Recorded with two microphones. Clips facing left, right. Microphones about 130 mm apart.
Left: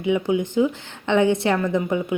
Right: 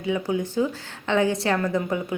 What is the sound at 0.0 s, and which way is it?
A woman's voice, 20° left (ahead or behind).